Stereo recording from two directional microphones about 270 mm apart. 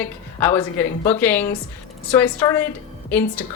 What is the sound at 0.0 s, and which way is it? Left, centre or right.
A woman's voice, centre.